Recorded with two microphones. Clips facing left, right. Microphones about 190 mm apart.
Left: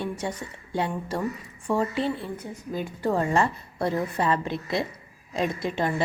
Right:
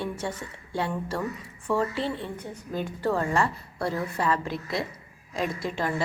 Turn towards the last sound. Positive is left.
turn(degrees=20)  # may be behind; listen again after turning